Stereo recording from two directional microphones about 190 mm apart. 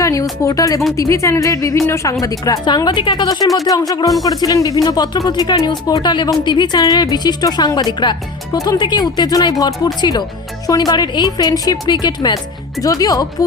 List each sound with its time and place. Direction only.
0.0 s a woman's voice: 15° left (ahead or behind)